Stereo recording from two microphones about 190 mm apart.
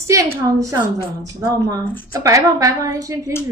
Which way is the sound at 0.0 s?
15° right (ahead or behind).